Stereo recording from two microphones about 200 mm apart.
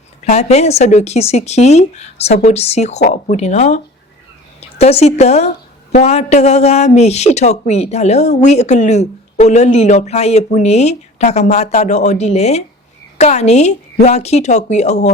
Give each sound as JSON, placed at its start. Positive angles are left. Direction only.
{"t": 0.3, "sound": "a man's voice", "side_deg": 35}
{"t": 4.8, "sound": "a man's voice", "side_deg": 30}